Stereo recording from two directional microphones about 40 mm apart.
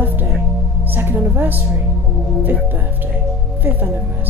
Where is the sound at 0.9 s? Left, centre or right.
Right.